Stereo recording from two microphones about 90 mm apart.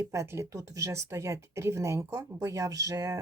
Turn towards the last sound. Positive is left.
turn(degrees=-40)  # may be behind; listen again after turning